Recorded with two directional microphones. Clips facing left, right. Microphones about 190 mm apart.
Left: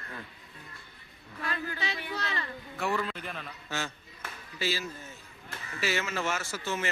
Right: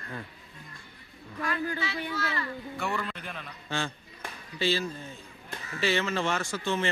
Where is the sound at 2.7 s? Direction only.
Centre (ahead or behind).